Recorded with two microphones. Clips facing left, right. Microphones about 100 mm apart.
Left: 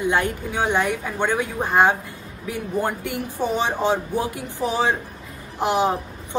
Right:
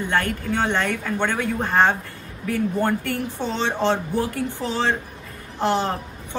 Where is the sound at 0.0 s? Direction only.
15° left (ahead or behind).